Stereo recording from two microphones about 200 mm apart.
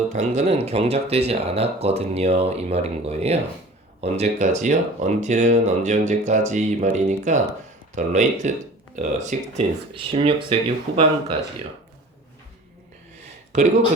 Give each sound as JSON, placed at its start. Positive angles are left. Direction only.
{"t": 0.1, "sound": "speech", "side_deg": -35}
{"t": 9.9, "sound": "speech", "side_deg": -25}